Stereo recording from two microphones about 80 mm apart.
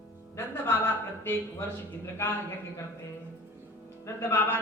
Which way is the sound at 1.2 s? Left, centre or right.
Left.